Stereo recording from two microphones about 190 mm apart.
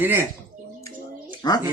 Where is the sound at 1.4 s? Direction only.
20° left (ahead or behind).